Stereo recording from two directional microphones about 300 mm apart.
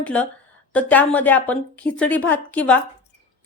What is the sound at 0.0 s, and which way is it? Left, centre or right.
A woman's voice, centre.